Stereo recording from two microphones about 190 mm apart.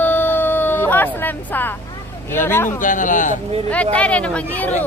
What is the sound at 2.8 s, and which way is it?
Speech, 45° left (ahead or behind).